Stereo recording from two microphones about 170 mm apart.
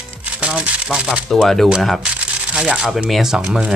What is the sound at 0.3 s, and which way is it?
Speech, 5° right (ahead or behind).